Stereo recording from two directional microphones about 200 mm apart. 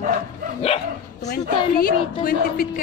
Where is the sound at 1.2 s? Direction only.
50° left (ahead or behind).